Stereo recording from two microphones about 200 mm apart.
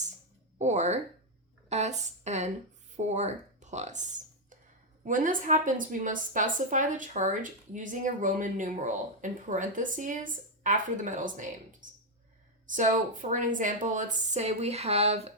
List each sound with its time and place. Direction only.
0.6 s a woman's voice: 35° right (ahead or behind)